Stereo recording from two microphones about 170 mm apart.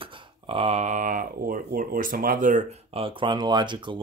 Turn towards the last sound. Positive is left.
turn(degrees=-25)  # may be behind; listen again after turning